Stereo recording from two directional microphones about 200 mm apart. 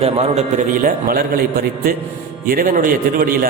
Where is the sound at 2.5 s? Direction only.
45° right (ahead or behind).